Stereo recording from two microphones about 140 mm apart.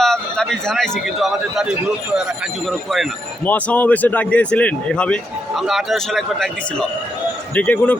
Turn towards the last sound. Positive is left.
turn(degrees=10)  # may be behind; listen again after turning